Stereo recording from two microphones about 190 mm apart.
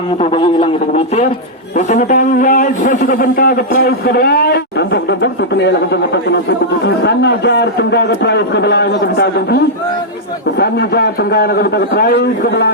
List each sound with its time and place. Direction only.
0.2 s a man's voice: 25° left (ahead or behind); by 9.6 s 60° left (ahead or behind)
10.6 s a man's voice: 55° left (ahead or behind)